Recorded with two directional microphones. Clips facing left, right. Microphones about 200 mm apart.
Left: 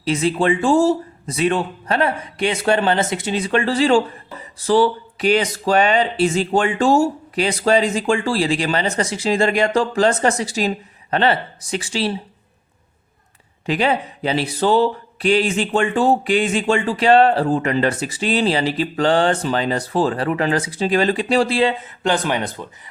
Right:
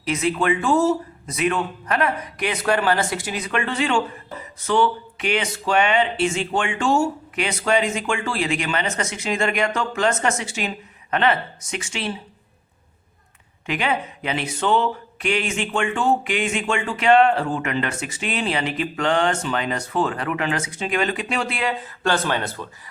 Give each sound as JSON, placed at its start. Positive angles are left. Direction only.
{"t": 0.0, "sound": "a man's voice", "side_deg": 30}
{"t": 13.7, "sound": "speech", "side_deg": 35}
{"t": 22.0, "sound": "speech", "side_deg": 15}